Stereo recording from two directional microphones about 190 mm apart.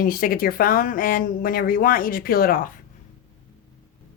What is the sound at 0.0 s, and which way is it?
Speech, 50° left (ahead or behind).